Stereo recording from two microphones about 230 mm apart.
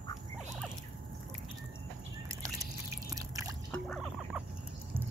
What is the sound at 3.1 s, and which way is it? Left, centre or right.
Drip, centre.